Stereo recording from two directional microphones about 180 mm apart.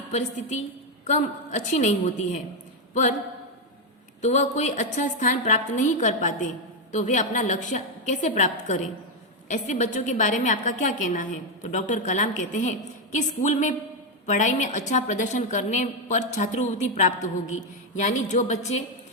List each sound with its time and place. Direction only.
0.1 s a woman's voice: 40° left (ahead or behind)
4.2 s a woman's voice: 40° left (ahead or behind)